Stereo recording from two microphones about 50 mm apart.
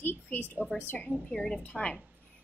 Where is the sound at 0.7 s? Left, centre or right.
Left.